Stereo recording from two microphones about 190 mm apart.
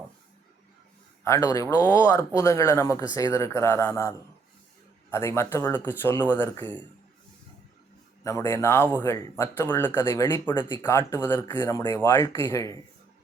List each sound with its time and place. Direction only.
1.2 s speech: 15° left (ahead or behind)
5.1 s speech: 15° left (ahead or behind)
8.2 s speech: 15° left (ahead or behind)